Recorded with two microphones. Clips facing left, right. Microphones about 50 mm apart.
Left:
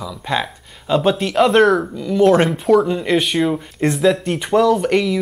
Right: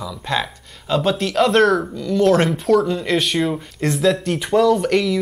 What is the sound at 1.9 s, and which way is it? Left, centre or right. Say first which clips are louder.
Speech: left 2 dB; centre.